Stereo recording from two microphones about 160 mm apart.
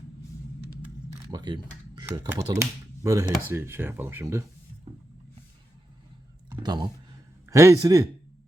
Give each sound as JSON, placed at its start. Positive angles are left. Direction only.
{"t": 1.3, "sound": "a sound", "side_deg": -25}
{"t": 2.0, "sound": "speech", "side_deg": -25}
{"t": 6.6, "sound": "a man's voice", "side_deg": -25}